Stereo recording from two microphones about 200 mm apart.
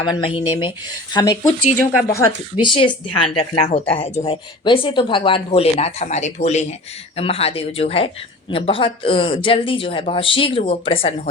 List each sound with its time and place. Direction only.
0.0 s speech: 25° left (ahead or behind)